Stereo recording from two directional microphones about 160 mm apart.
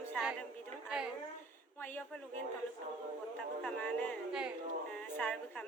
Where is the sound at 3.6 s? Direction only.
10° left (ahead or behind).